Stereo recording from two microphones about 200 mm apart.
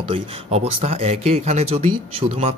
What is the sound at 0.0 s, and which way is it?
Speech, 30° right (ahead or behind).